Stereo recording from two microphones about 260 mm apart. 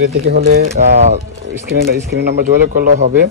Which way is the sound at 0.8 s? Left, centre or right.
Right.